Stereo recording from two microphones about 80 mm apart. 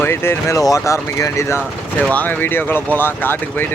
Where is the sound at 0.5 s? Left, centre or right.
Left.